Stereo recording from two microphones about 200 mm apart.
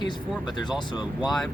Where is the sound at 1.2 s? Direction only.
Centre (ahead or behind).